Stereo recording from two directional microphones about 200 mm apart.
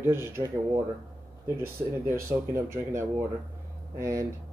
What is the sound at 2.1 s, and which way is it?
Speech, 10° right (ahead or behind).